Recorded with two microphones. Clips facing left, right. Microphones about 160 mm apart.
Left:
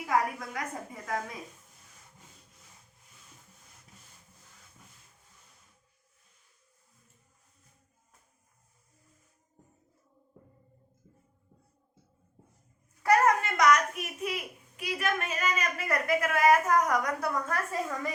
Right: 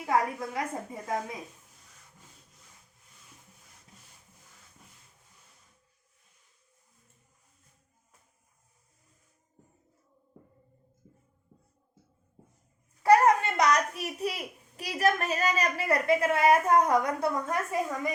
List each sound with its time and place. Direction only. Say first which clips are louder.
0.0 s a woman's voice: right 1 dB; 25° right (ahead or behind)
13.0 s a child's voice: right 3 dB; 30° right (ahead or behind)